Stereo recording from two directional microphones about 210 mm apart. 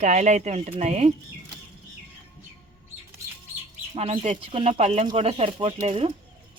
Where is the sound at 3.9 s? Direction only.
30° right (ahead or behind).